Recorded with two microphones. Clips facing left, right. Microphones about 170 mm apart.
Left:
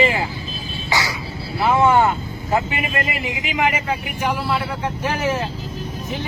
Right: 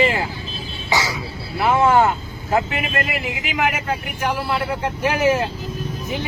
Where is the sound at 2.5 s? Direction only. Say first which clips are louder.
Right 1 dB; centre (ahead or behind).